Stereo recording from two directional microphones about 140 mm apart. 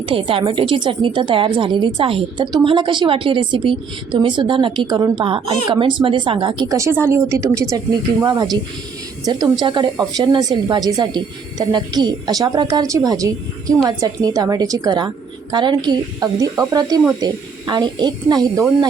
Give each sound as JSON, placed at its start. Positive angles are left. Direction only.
{"t": 0.0, "sound": "a woman's voice", "side_deg": -40}